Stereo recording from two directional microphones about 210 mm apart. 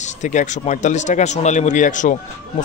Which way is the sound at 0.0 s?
35° left (ahead or behind).